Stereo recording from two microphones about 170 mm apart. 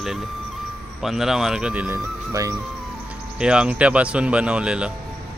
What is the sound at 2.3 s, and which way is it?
Music, 20° right (ahead or behind).